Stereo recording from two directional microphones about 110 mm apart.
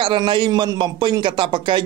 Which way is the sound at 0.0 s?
50° right (ahead or behind).